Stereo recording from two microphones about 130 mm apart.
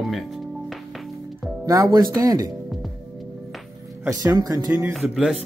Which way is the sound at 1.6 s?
30° right (ahead or behind).